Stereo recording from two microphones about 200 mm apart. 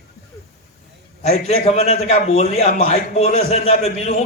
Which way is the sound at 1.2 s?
30° left (ahead or behind).